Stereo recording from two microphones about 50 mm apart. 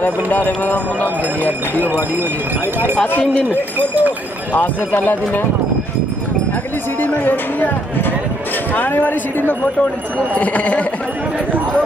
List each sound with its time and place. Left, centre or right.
0.0 s speech: left
1.0 s speech: right
3.1 s speech: left
3.4 s speech: right
4.6 s speech: left
7.0 s speech: left